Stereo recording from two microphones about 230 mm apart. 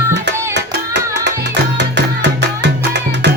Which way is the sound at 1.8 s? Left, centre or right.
Right.